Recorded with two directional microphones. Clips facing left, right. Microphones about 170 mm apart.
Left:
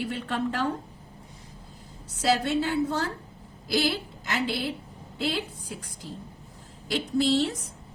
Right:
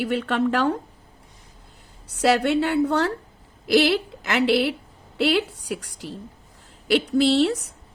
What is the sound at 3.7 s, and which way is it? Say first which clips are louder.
A woman's voice: right 8 dB; 85° right.